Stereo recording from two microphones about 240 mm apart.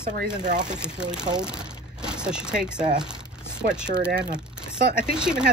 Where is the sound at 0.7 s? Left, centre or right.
Centre.